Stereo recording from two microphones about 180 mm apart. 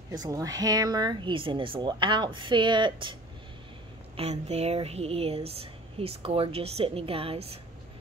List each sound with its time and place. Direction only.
0.1 s speech: 20° right (ahead or behind)
4.2 s speech: 35° right (ahead or behind)